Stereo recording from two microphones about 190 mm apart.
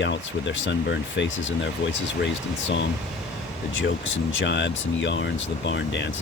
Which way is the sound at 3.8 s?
80° left.